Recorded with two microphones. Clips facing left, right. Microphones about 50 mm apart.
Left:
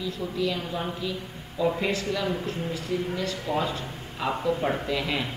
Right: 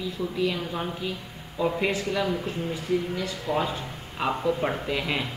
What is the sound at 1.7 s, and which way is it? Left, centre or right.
Speech, centre.